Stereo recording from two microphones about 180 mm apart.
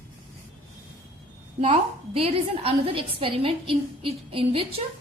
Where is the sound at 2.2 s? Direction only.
30° right (ahead or behind).